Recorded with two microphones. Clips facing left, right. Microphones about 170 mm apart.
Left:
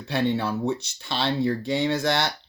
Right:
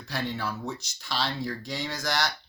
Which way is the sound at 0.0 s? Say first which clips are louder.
Left 8 dB; 25° left (ahead or behind).